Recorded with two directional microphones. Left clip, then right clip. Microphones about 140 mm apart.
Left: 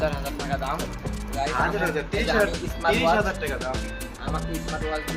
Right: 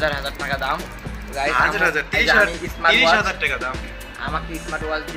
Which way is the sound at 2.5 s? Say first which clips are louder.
Right 7 dB; centre (ahead or behind).